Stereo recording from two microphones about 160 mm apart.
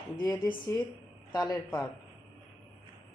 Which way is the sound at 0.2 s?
25° left (ahead or behind).